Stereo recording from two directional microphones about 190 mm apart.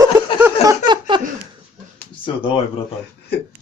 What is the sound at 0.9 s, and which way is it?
Laughter, 25° right (ahead or behind).